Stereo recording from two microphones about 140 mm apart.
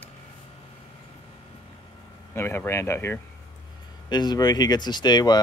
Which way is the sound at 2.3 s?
15° left (ahead or behind).